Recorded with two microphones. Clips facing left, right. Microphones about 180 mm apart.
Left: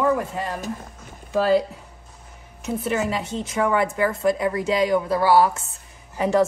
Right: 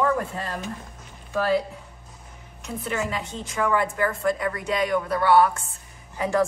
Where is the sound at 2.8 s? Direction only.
25° left (ahead or behind).